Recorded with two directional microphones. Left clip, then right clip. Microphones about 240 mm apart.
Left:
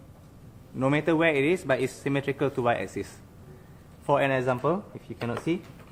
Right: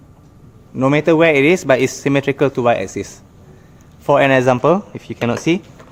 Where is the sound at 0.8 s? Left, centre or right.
Right.